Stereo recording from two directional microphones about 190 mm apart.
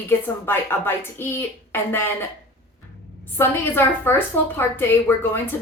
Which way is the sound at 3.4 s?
10° left (ahead or behind).